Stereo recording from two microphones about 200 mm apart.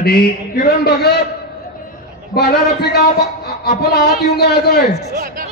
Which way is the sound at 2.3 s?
55° left (ahead or behind).